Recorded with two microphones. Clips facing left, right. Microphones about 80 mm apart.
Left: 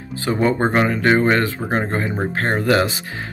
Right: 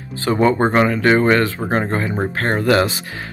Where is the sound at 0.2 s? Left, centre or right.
Centre.